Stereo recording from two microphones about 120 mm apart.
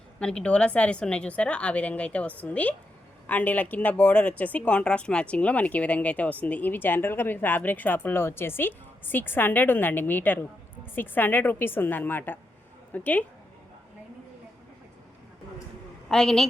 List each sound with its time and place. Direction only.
0.2 s speech: 10° left (ahead or behind)
16.0 s a woman's voice: 5° left (ahead or behind)